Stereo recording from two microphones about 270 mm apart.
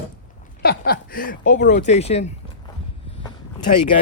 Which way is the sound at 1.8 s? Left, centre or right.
Left.